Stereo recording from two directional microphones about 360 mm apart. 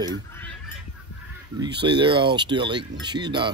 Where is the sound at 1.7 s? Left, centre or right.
Centre.